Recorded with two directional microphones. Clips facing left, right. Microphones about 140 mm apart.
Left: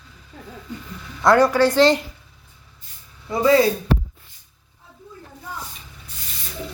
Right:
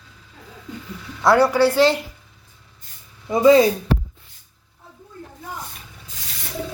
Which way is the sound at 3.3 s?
20° right (ahead or behind).